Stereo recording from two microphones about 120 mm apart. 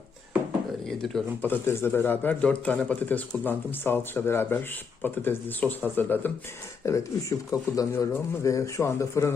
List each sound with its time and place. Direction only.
0.9 s speech: centre (ahead or behind)
1.4 s a man's voice: 15° left (ahead or behind)